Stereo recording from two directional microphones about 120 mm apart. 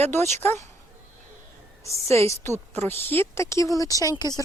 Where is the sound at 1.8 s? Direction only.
25° left (ahead or behind).